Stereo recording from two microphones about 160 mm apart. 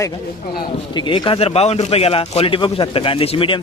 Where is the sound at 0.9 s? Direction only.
30° left (ahead or behind).